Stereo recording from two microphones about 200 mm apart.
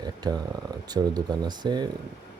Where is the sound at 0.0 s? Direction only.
20° right (ahead or behind).